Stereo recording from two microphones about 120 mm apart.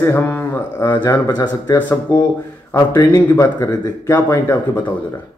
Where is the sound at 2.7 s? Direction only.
30° left (ahead or behind).